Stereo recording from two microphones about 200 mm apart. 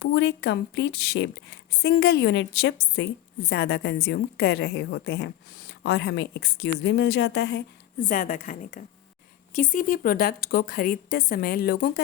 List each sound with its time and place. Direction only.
0.0 s a woman's voice: 60° left (ahead or behind)
8.0 s a woman's voice: 40° left (ahead or behind)